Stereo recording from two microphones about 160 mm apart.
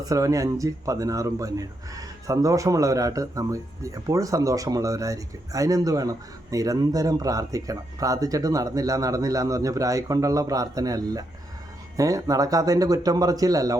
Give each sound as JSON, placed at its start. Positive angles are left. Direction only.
{"t": 0.0, "sound": "speech", "side_deg": -20}